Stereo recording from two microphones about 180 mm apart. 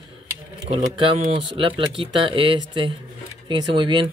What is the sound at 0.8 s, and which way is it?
Speech, 30° right (ahead or behind).